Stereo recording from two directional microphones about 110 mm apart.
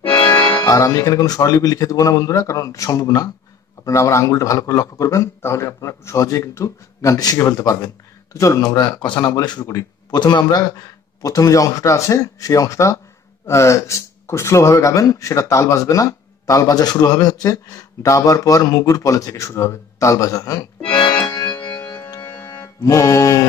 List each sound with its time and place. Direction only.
0.2 s music: 50° left (ahead or behind)
0.7 s speech: 30° left (ahead or behind)
21.2 s music: 30° left (ahead or behind)